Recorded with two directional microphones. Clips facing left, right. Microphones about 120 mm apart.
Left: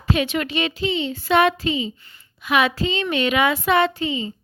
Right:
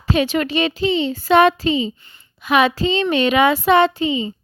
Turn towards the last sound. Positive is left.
turn(degrees=-20)  # may be behind; listen again after turning